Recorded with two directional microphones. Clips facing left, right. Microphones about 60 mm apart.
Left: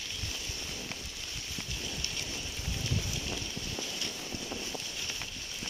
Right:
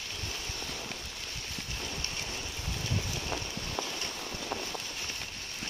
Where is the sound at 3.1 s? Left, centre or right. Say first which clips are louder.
Right 2 dB; right.